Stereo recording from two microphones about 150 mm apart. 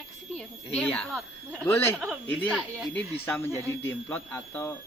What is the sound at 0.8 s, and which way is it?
Speech, 5° left (ahead or behind).